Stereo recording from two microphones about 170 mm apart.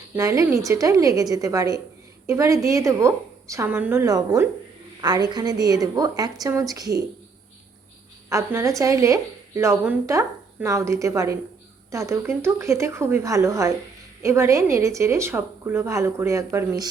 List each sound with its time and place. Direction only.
0.2 s a woman's voice: 20° right (ahead or behind)
8.3 s a woman's voice: 20° right (ahead or behind)